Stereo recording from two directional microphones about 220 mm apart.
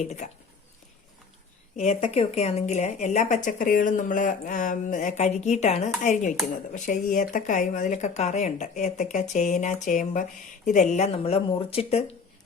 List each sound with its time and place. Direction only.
1.7 s speech: 35° left (ahead or behind)